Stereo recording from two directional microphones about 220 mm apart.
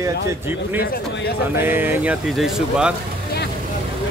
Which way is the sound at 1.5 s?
10° right (ahead or behind).